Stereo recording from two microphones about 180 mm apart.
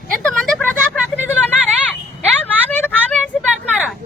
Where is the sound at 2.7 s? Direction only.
10° left (ahead or behind).